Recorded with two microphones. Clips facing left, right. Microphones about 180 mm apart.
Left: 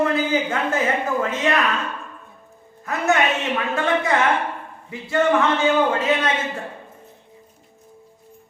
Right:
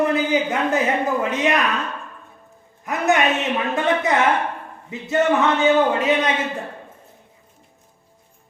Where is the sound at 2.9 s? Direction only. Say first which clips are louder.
Right 1 dB; 15° right (ahead or behind).